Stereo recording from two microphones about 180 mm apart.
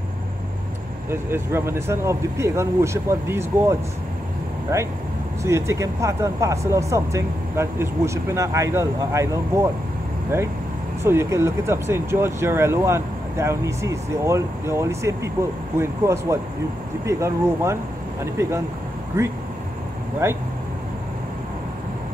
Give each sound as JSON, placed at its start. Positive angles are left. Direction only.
{"t": 1.1, "sound": "speech", "side_deg": -15}
{"t": 11.1, "sound": "speech", "side_deg": -15}
{"t": 20.2, "sound": "vehicle", "side_deg": -15}